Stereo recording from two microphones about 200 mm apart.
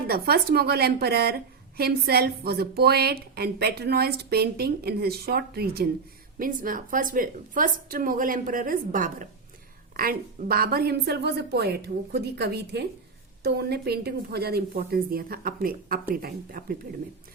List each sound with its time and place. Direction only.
0.1 s a woman's voice: 50° right (ahead or behind)